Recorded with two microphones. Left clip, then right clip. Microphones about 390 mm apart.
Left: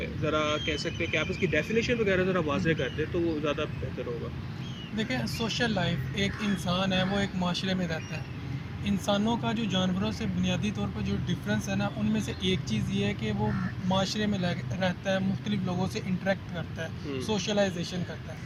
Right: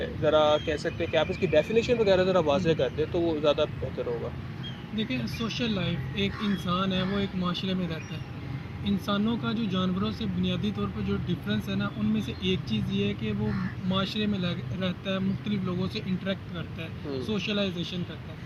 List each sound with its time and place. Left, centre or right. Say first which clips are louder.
0.3 s speech: right 6 dB; centre
4.9 s speech: left 1 dB; centre